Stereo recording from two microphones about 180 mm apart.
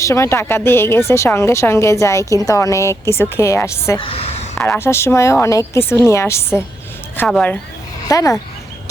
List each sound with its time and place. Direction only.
0.0 s speech: 15° left (ahead or behind)
4.0 s speech: 30° left (ahead or behind)
4.6 s speech: 15° left (ahead or behind)
8.0 s speech: 20° left (ahead or behind)